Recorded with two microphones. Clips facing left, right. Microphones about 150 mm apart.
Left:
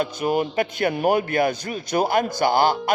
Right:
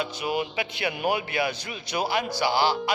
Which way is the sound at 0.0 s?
45° left (ahead or behind).